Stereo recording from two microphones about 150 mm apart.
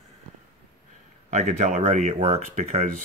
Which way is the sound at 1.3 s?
50° right (ahead or behind).